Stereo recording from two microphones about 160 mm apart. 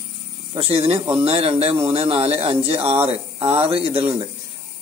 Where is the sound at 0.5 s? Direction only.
35° right (ahead or behind).